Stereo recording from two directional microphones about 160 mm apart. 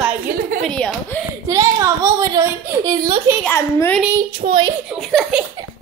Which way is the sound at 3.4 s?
15° left (ahead or behind).